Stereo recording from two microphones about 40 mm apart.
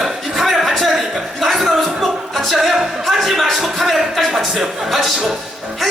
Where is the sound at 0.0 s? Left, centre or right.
Centre.